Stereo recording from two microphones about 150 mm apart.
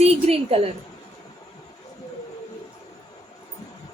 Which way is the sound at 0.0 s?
45° right (ahead or behind).